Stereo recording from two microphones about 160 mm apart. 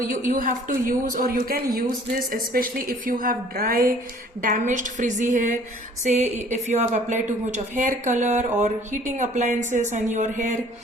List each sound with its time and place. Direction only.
0.1 s a woman's voice: 60° right (ahead or behind)
4.4 s a woman's voice: 55° right (ahead or behind)